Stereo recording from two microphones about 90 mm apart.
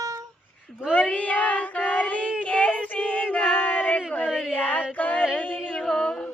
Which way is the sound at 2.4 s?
15° left (ahead or behind).